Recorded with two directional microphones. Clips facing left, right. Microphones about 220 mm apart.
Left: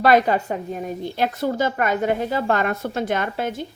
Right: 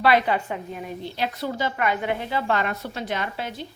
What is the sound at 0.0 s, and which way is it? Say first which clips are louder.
A woman's voice: left 4 dB; 45° left (ahead or behind).